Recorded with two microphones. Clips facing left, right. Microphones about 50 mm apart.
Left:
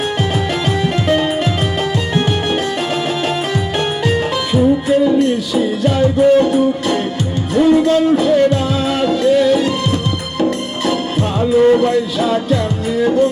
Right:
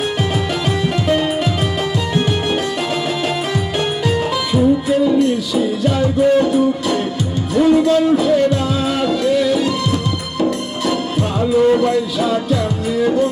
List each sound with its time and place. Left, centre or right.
1.0 s music: left
4.0 s music: left
11.3 s music: left